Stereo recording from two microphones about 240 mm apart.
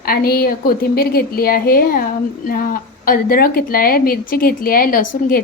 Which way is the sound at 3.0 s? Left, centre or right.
Left.